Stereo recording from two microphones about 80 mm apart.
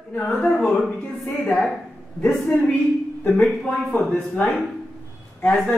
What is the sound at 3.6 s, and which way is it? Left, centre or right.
Speech, centre.